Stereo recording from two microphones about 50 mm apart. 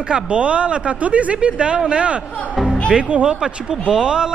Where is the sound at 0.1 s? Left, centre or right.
Right.